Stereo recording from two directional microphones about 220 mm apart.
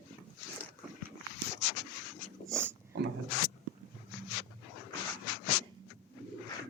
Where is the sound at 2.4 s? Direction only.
10° right (ahead or behind).